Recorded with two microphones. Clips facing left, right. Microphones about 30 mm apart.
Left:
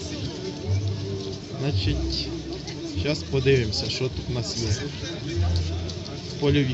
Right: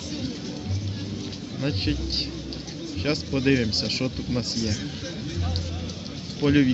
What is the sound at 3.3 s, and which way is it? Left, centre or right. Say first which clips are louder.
Speech: left 1 dB; centre.